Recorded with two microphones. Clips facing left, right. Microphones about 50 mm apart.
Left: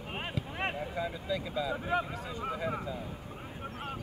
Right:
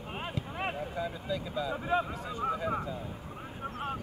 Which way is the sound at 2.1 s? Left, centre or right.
Right.